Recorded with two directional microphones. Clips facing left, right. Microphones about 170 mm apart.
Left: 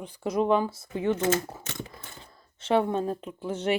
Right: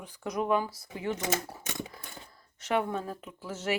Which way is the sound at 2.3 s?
25° left (ahead or behind).